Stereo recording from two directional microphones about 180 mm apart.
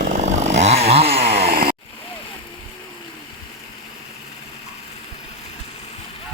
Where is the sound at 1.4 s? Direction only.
55° right (ahead or behind).